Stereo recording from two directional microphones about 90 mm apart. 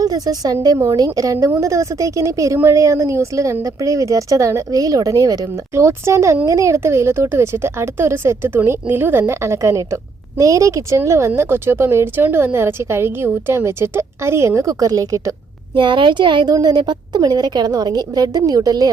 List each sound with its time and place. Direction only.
0.0 s speech: 45° right (ahead or behind)
15.7 s speech: 65° right (ahead or behind)
16.5 s a woman's voice: 45° right (ahead or behind)